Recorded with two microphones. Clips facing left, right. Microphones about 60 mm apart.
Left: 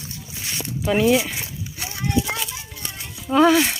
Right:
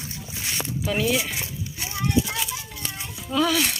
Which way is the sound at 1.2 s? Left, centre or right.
Centre.